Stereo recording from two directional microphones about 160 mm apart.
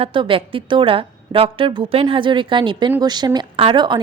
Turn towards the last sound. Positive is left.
turn(degrees=-30)  # may be behind; listen again after turning